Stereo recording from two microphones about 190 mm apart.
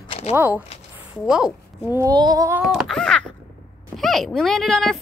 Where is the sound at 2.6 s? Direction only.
Centre (ahead or behind).